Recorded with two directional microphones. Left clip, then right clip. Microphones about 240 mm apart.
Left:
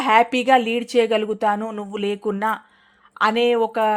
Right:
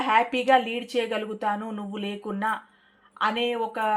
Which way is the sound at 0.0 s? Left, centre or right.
Left.